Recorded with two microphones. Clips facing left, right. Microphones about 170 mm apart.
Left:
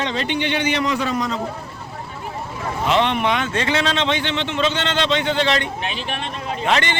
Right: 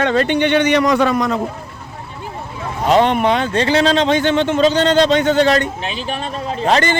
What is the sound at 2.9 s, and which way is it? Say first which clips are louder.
Speech: right 6 dB; 40° right (ahead or behind).